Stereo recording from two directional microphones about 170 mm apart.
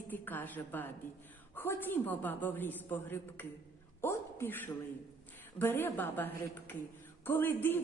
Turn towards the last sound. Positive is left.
turn(degrees=10)  # may be behind; listen again after turning